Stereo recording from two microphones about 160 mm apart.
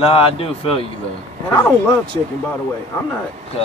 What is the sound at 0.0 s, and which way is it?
Speech, 35° left (ahead or behind).